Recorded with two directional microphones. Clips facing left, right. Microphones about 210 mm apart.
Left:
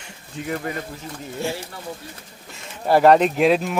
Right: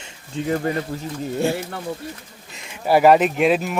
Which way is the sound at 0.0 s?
30° right (ahead or behind).